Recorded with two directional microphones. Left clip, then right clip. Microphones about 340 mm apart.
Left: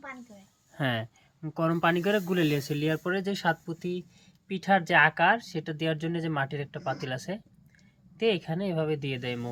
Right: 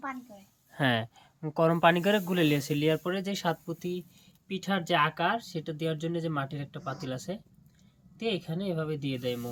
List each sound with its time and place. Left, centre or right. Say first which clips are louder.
0.7 s speech: right 3 dB; centre
8.2 s speech: left 5 dB; centre